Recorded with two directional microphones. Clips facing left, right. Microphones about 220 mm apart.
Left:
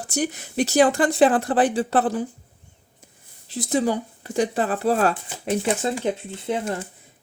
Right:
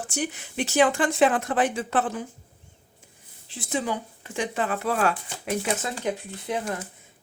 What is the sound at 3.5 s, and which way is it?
Speech, 40° left (ahead or behind).